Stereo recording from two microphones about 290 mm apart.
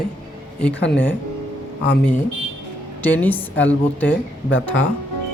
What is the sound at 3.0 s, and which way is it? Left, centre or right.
A woman's voice, centre.